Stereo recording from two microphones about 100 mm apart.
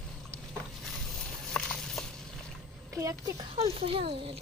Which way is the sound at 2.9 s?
30° right (ahead or behind).